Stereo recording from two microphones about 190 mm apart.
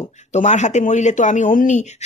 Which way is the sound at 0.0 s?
35° left (ahead or behind).